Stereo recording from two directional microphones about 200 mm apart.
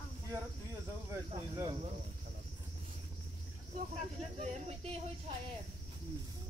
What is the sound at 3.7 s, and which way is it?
Speech, 35° right (ahead or behind).